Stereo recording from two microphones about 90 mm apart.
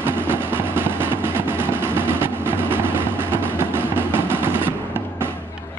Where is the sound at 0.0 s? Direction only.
25° right (ahead or behind).